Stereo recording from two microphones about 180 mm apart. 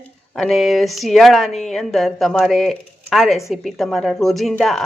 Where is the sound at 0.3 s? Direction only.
Centre (ahead or behind).